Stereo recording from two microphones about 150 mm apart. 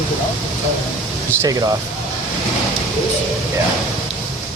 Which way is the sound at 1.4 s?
25° right (ahead or behind).